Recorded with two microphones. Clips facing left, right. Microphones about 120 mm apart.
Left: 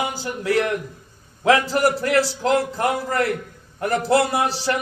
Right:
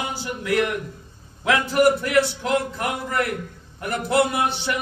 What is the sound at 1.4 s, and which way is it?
A man's voice, 35° left (ahead or behind).